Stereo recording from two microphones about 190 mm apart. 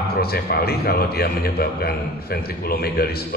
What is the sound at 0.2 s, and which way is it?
A man's voice, 55° left (ahead or behind).